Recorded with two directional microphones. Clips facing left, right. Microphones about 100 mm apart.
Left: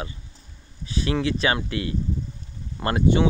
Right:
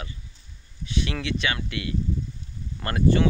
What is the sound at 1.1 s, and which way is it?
Speech, 35° left (ahead or behind).